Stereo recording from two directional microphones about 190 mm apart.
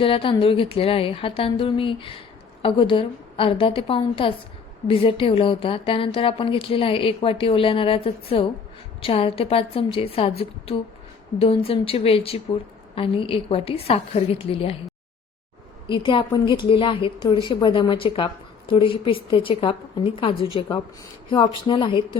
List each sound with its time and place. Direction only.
0.0 s a woman's voice: 30° left (ahead or behind)
15.9 s a woman's voice: 25° left (ahead or behind)